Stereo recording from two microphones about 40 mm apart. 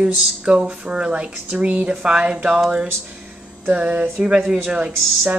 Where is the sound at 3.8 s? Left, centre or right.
Right.